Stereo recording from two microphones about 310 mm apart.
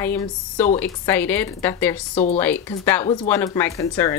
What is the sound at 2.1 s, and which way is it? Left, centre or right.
Speech, centre.